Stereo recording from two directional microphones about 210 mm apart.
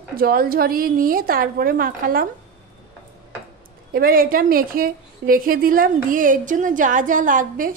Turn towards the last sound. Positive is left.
turn(degrees=-40)  # may be behind; listen again after turning